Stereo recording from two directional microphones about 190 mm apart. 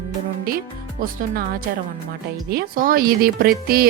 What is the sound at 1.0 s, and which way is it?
Speech, 50° right (ahead or behind).